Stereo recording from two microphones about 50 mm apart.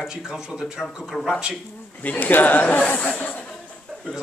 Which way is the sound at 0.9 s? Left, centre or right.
Centre.